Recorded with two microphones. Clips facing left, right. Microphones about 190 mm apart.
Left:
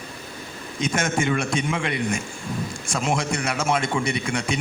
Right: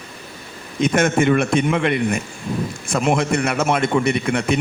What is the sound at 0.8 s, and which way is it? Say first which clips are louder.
Speech: right 7 dB; 55° right (ahead or behind).